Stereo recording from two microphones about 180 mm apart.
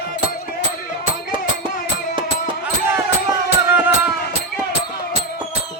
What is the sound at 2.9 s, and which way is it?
Music, 10° right (ahead or behind).